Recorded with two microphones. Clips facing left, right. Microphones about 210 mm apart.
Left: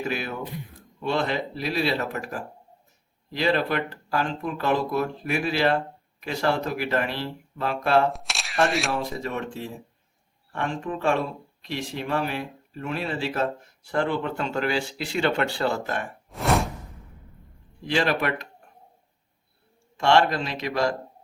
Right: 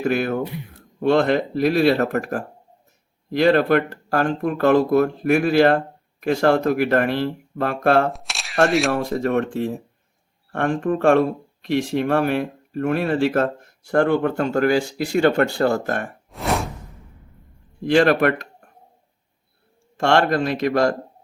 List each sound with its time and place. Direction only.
0.0 s speech: 50° right (ahead or behind)
8.1 s speech: centre (ahead or behind)
8.9 s speech: 50° right (ahead or behind)
16.3 s a sound: centre (ahead or behind)
17.8 s speech: 50° right (ahead or behind)
20.0 s speech: 50° right (ahead or behind)